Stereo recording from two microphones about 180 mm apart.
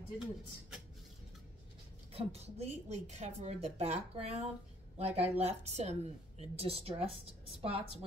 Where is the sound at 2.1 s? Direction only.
35° right (ahead or behind).